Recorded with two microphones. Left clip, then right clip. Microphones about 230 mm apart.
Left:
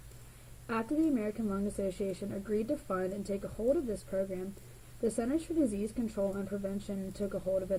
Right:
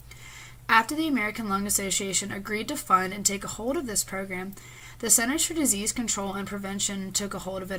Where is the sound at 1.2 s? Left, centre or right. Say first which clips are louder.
Right 8 dB; right.